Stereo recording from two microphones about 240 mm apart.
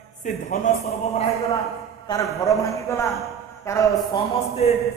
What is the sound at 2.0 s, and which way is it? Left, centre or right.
Speech, centre.